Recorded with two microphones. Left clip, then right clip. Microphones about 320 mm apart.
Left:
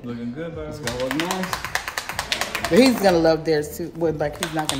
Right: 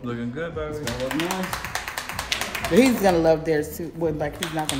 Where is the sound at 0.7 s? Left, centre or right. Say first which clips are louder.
Left 2 dB; left.